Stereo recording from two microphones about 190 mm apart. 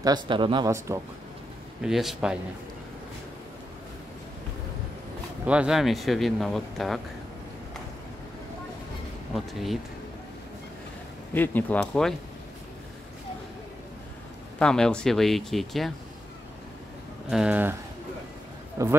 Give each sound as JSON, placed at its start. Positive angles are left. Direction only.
{"t": 0.0, "sound": "speech", "side_deg": -25}
{"t": 0.7, "sound": "speech", "side_deg": -15}
{"t": 1.8, "sound": "speech", "side_deg": 0}
{"t": 5.4, "sound": "speech", "side_deg": -5}
{"t": 9.3, "sound": "speech", "side_deg": 0}
{"t": 11.3, "sound": "speech", "side_deg": 10}
{"t": 14.6, "sound": "speech", "side_deg": 5}
{"t": 17.3, "sound": "speech", "side_deg": -5}
{"t": 18.8, "sound": "speech", "side_deg": -15}